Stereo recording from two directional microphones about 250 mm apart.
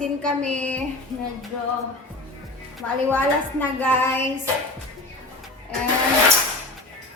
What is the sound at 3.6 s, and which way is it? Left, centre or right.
Child singing, centre.